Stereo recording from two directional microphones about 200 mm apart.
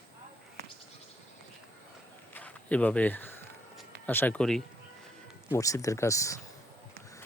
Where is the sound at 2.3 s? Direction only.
5° left (ahead or behind).